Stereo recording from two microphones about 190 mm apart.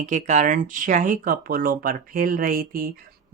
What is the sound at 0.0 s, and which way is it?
Speech, 40° right (ahead or behind).